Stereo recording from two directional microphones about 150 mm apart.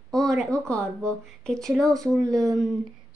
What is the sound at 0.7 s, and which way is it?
Speech, 5° left (ahead or behind).